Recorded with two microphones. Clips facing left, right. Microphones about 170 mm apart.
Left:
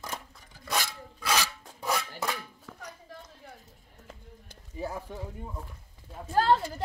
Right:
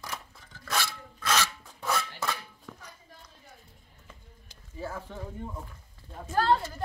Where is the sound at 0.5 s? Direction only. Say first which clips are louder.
Even; 15° left (ahead or behind).